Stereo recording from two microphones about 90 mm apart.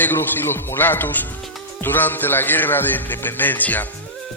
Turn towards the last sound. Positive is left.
turn(degrees=20)  # may be behind; listen again after turning